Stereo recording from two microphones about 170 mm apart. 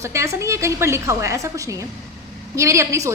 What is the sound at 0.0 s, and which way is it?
A woman's voice, 15° right (ahead or behind).